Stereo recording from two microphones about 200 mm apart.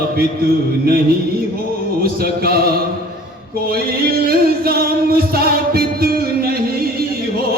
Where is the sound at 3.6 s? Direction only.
50° right (ahead or behind).